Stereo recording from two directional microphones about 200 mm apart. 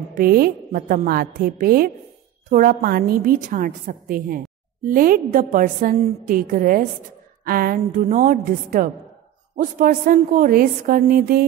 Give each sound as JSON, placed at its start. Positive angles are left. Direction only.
{"t": 0.1, "sound": "a woman's voice", "side_deg": -45}